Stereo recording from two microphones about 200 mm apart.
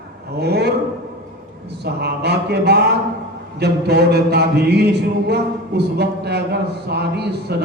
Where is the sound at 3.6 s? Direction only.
55° right (ahead or behind).